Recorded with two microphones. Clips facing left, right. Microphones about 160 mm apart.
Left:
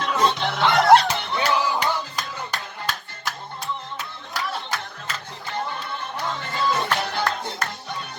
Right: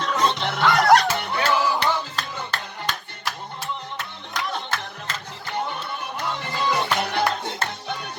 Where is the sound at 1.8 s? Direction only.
10° left (ahead or behind).